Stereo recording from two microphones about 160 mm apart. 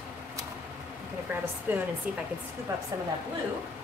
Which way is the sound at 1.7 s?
15° right (ahead or behind).